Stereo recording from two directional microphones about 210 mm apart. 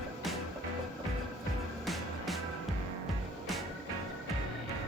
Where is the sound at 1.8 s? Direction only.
Centre (ahead or behind).